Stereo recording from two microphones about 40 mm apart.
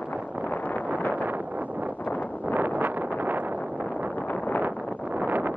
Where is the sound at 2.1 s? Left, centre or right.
Left.